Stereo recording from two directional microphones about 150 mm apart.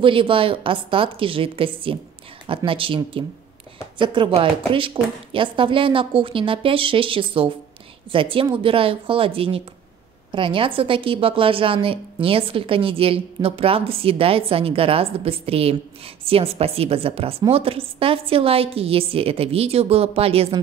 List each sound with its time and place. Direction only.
0.0 s a woman's voice: 35° right (ahead or behind)